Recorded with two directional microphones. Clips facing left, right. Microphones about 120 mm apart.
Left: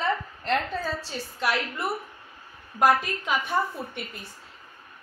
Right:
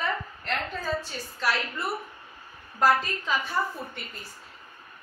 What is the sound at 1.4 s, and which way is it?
A woman's voice, 15° left (ahead or behind).